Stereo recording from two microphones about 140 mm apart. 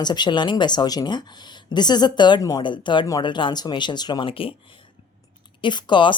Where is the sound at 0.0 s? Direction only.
30° left (ahead or behind).